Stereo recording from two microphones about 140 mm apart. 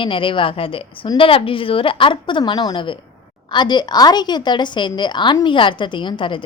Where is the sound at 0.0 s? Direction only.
35° left (ahead or behind).